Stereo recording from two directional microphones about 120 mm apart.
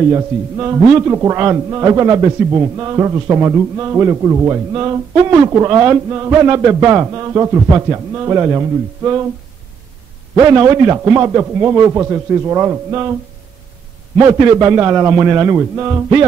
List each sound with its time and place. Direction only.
0.1 s a man's voice: 25° right (ahead or behind)
10.4 s a man's voice: 30° right (ahead or behind)
14.2 s a man's voice: 40° right (ahead or behind)
14.6 s a man's voice: 25° right (ahead or behind)